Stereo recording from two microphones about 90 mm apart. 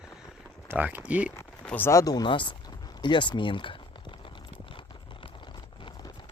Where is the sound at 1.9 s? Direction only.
40° left (ahead or behind).